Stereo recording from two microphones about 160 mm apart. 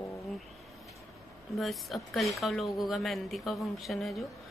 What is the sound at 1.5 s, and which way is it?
A woman's voice, centre (ahead or behind).